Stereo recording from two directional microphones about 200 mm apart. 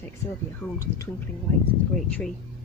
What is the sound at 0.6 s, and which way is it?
Speech, 15° left (ahead or behind).